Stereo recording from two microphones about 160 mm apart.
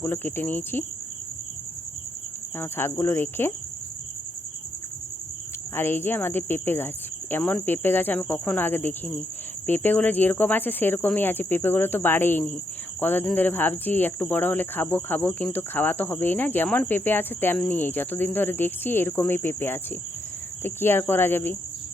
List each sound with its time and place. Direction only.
0.0 s speech: 15° left (ahead or behind)
2.6 s speech: 15° left (ahead or behind)
5.7 s speech: 15° left (ahead or behind)